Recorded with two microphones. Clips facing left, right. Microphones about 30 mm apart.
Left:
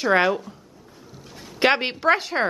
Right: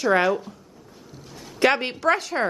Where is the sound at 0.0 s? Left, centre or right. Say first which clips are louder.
Left 1 dB; left.